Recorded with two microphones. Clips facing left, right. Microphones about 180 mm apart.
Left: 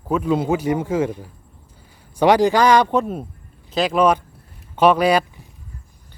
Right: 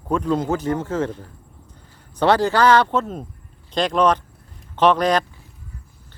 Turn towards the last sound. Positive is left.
turn(degrees=10)  # may be behind; listen again after turning